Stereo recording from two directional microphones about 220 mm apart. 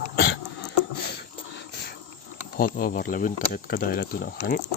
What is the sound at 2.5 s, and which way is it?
Speech, 40° left (ahead or behind).